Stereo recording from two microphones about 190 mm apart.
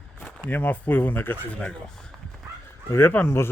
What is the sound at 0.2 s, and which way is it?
Speech, 5° left (ahead or behind).